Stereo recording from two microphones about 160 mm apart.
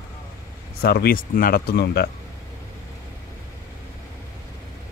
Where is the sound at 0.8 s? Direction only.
80° left.